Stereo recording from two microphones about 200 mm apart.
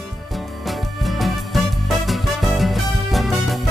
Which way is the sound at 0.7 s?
Centre (ahead or behind).